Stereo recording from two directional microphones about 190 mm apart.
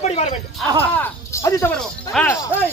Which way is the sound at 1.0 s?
15° left (ahead or behind).